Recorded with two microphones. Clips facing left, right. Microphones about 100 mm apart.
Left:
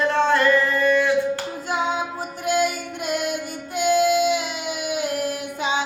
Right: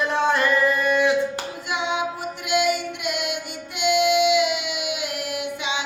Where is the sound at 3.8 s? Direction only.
35° left (ahead or behind).